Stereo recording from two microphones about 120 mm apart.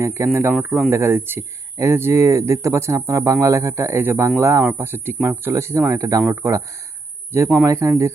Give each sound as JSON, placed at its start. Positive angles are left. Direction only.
{"t": 0.0, "sound": "speech", "side_deg": -25}
{"t": 7.6, "sound": "speech", "side_deg": -25}